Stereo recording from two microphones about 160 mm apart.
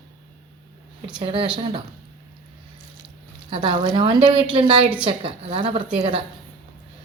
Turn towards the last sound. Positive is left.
turn(degrees=-35)  # may be behind; listen again after turning